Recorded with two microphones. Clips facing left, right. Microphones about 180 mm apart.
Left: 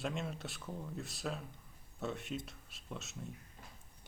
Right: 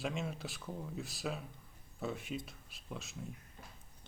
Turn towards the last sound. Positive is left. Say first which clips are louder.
# even
turn(degrees=0)  # may be behind; listen again after turning